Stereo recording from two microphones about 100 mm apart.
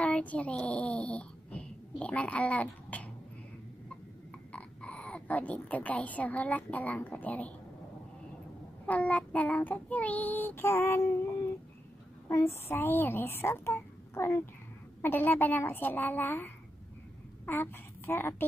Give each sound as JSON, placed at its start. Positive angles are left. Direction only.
{"t": 0.0, "sound": "speech", "side_deg": 15}
{"t": 4.5, "sound": "speech", "side_deg": 10}
{"t": 8.8, "sound": "child singing", "side_deg": 15}
{"t": 12.3, "sound": "a woman's voice", "side_deg": 25}